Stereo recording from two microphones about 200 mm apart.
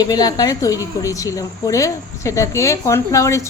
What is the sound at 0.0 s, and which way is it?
Speech, 20° left (ahead or behind).